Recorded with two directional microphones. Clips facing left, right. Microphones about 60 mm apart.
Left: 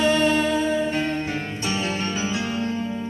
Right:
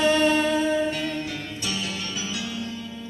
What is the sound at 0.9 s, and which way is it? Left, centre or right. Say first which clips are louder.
Music: left 4 dB; left.